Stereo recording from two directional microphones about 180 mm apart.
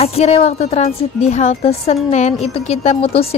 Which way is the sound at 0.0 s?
35° left (ahead or behind).